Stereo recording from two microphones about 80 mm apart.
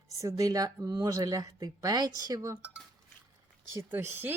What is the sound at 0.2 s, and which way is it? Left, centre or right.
Speech, right.